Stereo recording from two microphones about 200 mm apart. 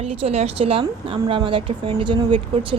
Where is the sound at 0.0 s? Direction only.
30° right (ahead or behind).